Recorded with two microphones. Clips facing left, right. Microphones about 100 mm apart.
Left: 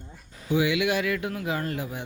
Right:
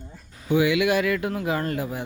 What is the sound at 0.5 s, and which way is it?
Speech, 55° right (ahead or behind).